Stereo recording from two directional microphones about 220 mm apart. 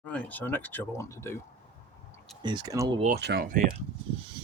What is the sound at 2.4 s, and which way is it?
Speech, 20° right (ahead or behind).